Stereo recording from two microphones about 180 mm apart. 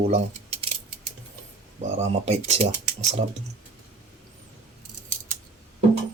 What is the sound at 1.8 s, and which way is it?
Speech, 40° right (ahead or behind).